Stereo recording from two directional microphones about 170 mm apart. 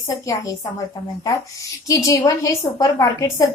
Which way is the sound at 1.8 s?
20° left (ahead or behind).